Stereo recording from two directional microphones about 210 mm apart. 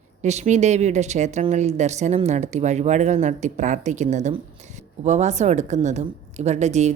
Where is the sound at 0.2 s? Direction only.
35° right (ahead or behind).